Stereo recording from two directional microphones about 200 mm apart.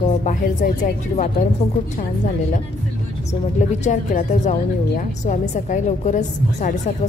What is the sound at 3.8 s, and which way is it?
A woman's voice, 35° left (ahead or behind).